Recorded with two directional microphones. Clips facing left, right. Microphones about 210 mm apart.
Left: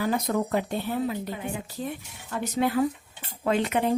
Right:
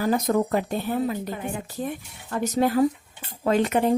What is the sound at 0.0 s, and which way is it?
A woman's voice, 40° right (ahead or behind).